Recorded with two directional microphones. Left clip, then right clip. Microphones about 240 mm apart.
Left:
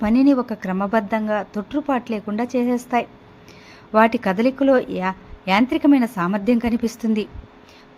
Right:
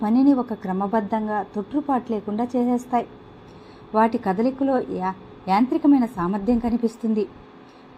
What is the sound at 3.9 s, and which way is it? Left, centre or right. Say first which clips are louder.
A woman's voice: left 4 dB; left.